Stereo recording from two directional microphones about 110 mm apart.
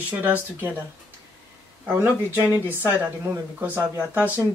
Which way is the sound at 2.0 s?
20° right (ahead or behind).